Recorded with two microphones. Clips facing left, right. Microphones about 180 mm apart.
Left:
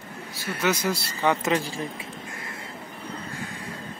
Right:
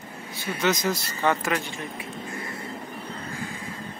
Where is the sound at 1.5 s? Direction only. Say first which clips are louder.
Left 3 dB; 30° left (ahead or behind).